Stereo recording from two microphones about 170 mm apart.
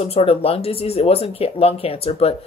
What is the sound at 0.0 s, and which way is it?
Speech, 35° left (ahead or behind).